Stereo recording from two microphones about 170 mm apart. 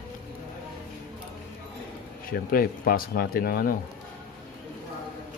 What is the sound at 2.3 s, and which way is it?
Speech, 60° left (ahead or behind).